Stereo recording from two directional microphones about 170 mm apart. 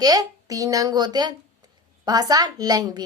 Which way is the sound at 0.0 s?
20° right (ahead or behind).